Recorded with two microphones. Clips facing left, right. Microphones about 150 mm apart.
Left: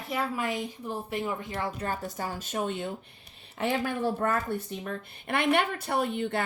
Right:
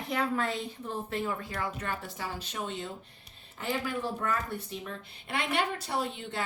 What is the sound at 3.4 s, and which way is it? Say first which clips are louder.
Speech: left 5 dB; 65° left (ahead or behind).